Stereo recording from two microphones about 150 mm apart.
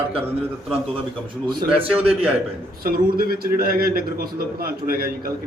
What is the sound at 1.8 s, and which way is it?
Speech, 40° right (ahead or behind).